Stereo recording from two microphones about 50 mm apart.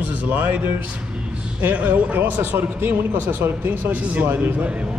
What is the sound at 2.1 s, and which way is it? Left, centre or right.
Speech, right.